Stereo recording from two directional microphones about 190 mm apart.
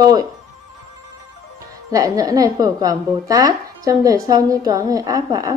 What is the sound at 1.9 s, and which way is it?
Speech, 20° right (ahead or behind).